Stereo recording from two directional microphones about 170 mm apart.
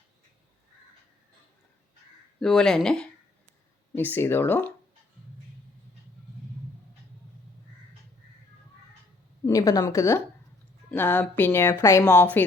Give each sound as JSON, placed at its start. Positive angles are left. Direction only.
{"t": 2.4, "sound": "a woman's voice", "side_deg": 0}
{"t": 9.5, "sound": "a woman's voice", "side_deg": 20}